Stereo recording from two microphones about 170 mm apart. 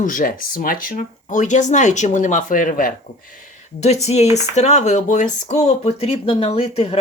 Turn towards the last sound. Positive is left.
turn(degrees=35)  # may be behind; listen again after turning